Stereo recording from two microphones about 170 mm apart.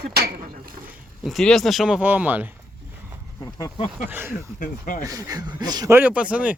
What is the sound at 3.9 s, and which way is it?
Speech, 10° right (ahead or behind).